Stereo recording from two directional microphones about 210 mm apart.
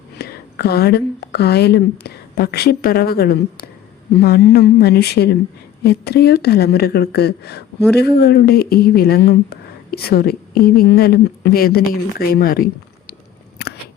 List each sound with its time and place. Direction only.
0.2 s a woman's voice: 50° left (ahead or behind)